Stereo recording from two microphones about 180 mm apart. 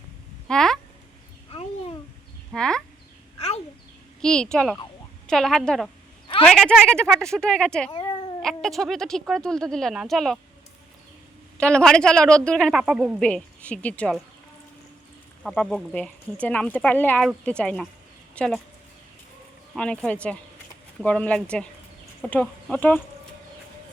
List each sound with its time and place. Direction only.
0.4 s a sound: 5° left (ahead or behind)
1.5 s babbling: 30° left (ahead or behind)
2.5 s a sound: 5° left (ahead or behind)
4.2 s speech: 5° left (ahead or behind)
7.9 s cat: 25° left (ahead or behind)
8.4 s speech: centre (ahead or behind)
11.5 s speech: 5° left (ahead or behind)
15.4 s speech: 5° left (ahead or behind)
19.7 s speech: 5° left (ahead or behind)